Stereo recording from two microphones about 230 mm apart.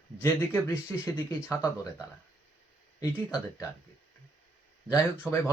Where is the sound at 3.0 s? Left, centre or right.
Centre.